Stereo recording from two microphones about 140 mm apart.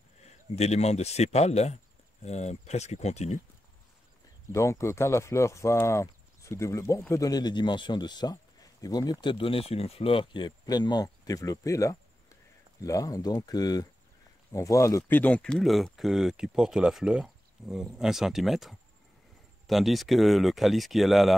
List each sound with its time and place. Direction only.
0.6 s a man's voice: 50° left (ahead or behind)
4.5 s speech: 20° left (ahead or behind); by 21.4 s centre (ahead or behind)